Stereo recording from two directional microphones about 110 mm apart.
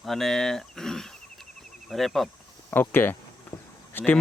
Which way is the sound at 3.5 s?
30° left (ahead or behind).